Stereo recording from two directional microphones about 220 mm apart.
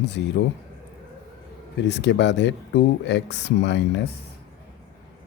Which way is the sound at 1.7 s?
50° left (ahead or behind).